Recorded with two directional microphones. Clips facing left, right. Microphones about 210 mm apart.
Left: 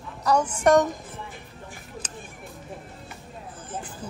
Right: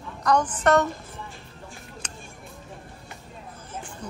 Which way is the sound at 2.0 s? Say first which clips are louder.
Left 2 dB; 5° left (ahead or behind).